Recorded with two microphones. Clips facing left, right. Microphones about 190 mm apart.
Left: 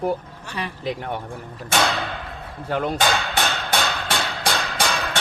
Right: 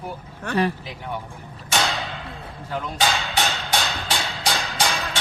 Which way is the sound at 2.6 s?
60° left (ahead or behind).